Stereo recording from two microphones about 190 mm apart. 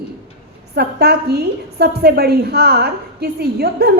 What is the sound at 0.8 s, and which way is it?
A woman's voice, 55° right (ahead or behind).